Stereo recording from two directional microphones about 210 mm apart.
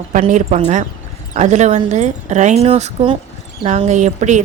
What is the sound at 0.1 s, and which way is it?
Speech, 35° right (ahead or behind).